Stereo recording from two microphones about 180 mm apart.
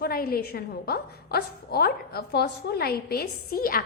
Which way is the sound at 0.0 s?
55° left (ahead or behind).